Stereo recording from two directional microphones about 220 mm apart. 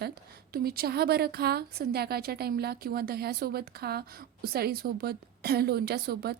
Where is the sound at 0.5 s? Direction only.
45° right (ahead or behind).